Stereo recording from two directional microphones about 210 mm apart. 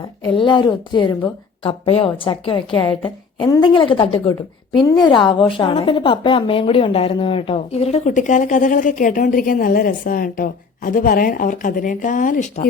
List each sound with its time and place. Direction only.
0.3 s a woman's voice: 25° left (ahead or behind)